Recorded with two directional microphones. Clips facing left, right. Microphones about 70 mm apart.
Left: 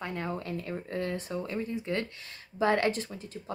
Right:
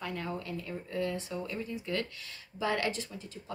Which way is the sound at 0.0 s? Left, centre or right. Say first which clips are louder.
Left 2 dB; left.